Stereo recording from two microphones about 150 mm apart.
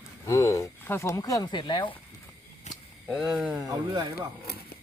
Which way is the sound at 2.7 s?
50° left (ahead or behind).